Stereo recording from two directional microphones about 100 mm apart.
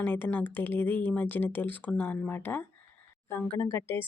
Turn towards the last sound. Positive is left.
turn(degrees=25)  # may be behind; listen again after turning